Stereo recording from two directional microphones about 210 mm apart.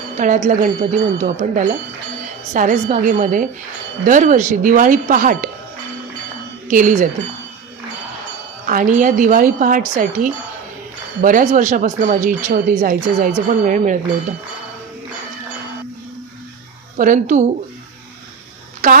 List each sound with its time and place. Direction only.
0.2 s speech: 35° right (ahead or behind)
6.7 s speech: 35° right (ahead or behind)
8.6 s speech: 40° right (ahead or behind)
17.0 s speech: 35° right (ahead or behind)
18.8 s speech: 35° right (ahead or behind)